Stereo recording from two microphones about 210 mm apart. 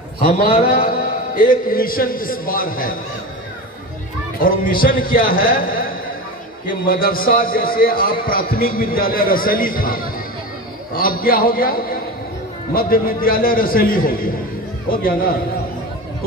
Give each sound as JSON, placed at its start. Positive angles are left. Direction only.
{"t": 0.2, "sound": "a man's voice", "side_deg": 45}
{"t": 4.4, "sound": "a man's voice", "side_deg": 40}
{"t": 6.9, "sound": "a man's voice", "side_deg": 45}